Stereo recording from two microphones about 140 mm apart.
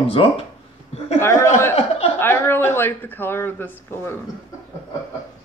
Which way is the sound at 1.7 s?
45° left (ahead or behind).